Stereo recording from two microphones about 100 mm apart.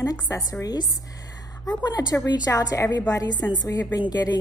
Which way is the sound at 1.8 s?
40° left (ahead or behind).